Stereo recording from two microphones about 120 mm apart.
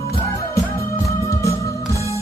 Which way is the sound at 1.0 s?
25° left (ahead or behind).